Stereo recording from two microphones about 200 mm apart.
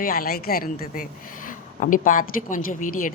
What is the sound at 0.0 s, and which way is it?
Speech, 45° left (ahead or behind).